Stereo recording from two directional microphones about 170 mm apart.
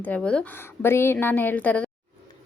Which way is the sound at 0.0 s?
5° left (ahead or behind).